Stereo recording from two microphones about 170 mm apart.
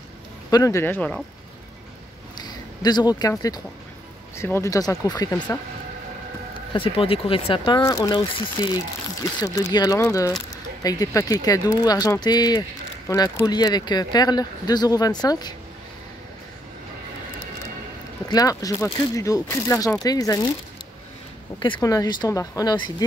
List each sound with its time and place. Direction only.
0.5 s speech: 20° left (ahead or behind)
2.3 s speech: 25° left (ahead or behind)
6.7 s speech: 30° left (ahead or behind)
7.8 s speech: 20° left (ahead or behind)
18.3 s speech: 20° left (ahead or behind)
21.5 s speech: 30° left (ahead or behind)